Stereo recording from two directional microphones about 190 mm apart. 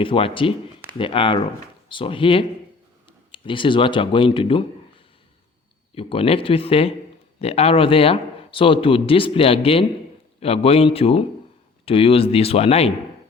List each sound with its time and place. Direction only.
0.0 s speech: 30° left (ahead or behind)
5.9 s speech: 30° left (ahead or behind)